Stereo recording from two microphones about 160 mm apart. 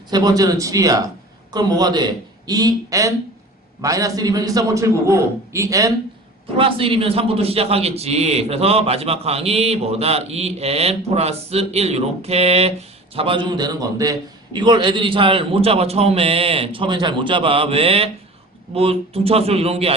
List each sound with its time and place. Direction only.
0.1 s a man's voice: 25° right (ahead or behind)
6.6 s a man's voice: 35° right (ahead or behind)